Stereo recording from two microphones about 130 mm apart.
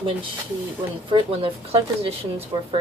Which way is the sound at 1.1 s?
45° right (ahead or behind).